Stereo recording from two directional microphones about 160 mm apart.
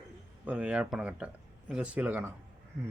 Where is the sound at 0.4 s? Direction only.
5° right (ahead or behind).